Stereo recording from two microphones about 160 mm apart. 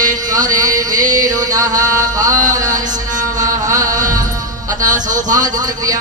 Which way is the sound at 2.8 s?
50° right (ahead or behind).